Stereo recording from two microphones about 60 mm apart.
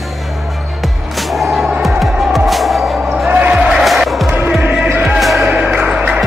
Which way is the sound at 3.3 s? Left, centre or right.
Right.